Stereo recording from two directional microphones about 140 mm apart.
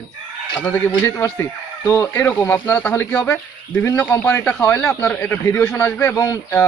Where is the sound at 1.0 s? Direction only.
15° left (ahead or behind).